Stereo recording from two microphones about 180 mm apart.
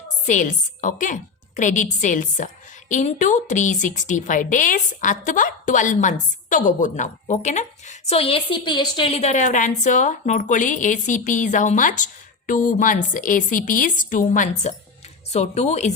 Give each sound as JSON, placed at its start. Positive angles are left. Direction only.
{"t": 0.3, "sound": "a woman's voice", "side_deg": 45}